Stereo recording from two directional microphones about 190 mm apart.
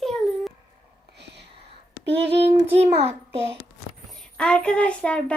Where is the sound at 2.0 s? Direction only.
65° right (ahead or behind).